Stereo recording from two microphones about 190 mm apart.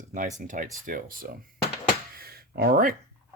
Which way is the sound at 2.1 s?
55° right (ahead or behind).